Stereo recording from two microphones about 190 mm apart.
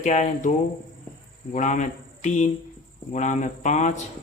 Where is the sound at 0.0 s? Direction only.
40° left (ahead or behind).